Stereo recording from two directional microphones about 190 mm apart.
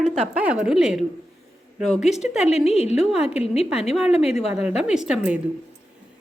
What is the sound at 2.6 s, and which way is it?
Speech, 35° left (ahead or behind).